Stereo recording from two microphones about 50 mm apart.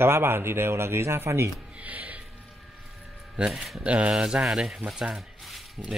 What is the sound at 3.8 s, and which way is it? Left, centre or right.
Speech, right.